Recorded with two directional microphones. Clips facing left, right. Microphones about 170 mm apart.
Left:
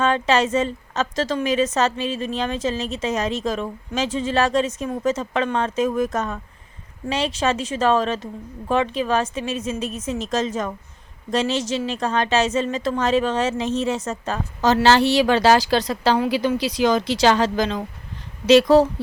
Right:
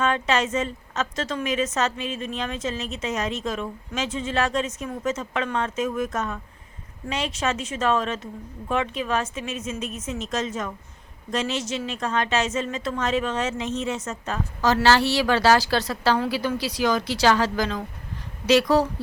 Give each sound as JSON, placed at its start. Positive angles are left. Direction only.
{"t": 0.0, "sound": "a woman's voice", "side_deg": 30}
{"t": 14.6, "sound": "a woman's voice", "side_deg": 20}